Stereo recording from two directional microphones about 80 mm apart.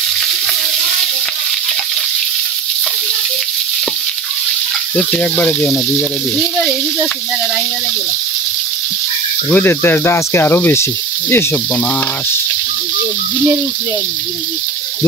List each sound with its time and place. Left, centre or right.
4.9 s speech: centre
6.3 s speech: centre
9.5 s snake: left